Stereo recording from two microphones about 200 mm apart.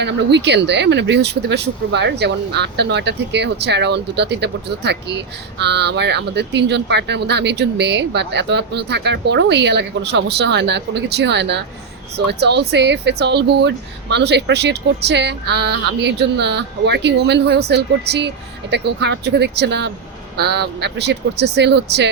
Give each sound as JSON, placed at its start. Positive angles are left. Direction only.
{"t": 0.0, "sound": "speech", "side_deg": -60}